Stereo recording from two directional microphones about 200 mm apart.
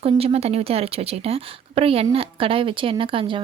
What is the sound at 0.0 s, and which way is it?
Speech, 30° right (ahead or behind).